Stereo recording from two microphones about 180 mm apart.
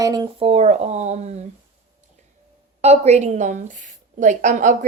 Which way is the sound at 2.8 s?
35° right (ahead or behind).